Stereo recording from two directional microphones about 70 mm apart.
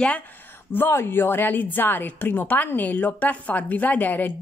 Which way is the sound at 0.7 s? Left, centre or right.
Left.